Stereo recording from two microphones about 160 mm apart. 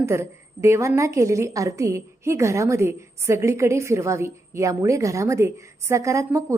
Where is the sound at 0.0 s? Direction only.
15° right (ahead or behind).